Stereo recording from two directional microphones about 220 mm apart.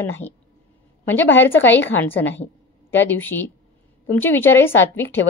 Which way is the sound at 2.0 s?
10° left (ahead or behind).